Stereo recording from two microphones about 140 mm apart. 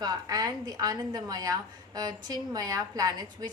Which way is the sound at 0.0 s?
25° right (ahead or behind).